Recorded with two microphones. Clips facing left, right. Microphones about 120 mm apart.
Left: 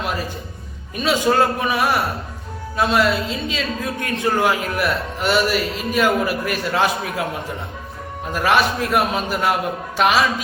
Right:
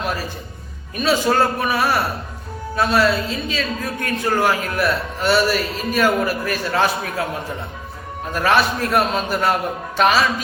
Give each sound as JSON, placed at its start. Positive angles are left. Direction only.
{"t": 0.9, "sound": "a woman's voice", "side_deg": 15}
{"t": 8.3, "sound": "speech", "side_deg": 10}